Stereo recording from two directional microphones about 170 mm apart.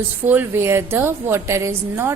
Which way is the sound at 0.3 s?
10° right (ahead or behind).